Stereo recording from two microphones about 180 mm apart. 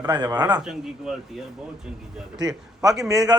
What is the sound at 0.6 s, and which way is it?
Speech, 5° right (ahead or behind).